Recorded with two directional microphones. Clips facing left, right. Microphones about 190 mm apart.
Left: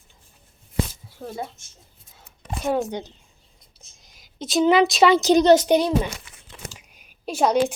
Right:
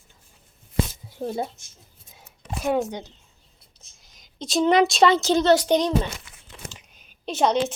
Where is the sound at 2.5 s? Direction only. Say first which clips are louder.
Even; centre (ahead or behind).